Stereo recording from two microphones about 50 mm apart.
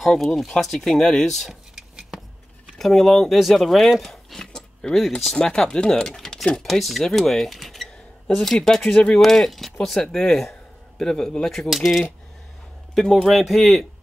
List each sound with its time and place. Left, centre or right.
0.2 s speech: centre
1.5 s a sound: centre
2.8 s speech: centre
8.5 s speech: centre
9.2 s speech: centre
11.7 s speech: centre
13.2 s speech: centre